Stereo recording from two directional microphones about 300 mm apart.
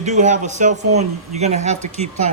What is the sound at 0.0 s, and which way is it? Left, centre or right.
Speech, right.